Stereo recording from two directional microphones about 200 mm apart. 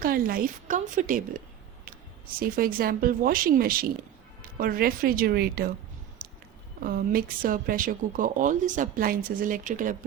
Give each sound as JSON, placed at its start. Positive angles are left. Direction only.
{"t": 0.0, "sound": "speech", "side_deg": -45}
{"t": 2.4, "sound": "speech", "side_deg": -45}
{"t": 6.8, "sound": "speech", "side_deg": -45}